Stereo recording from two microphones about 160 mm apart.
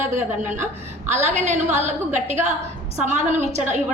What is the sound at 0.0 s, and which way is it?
A woman's voice, 50° right (ahead or behind).